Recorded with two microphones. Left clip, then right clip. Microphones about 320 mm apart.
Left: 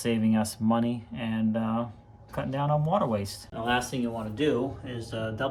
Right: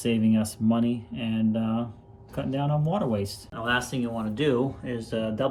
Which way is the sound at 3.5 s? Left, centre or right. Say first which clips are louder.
Right 1 dB; centre.